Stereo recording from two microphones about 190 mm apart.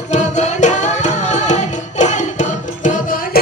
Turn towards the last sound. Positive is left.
turn(degrees=40)  # may be behind; listen again after turning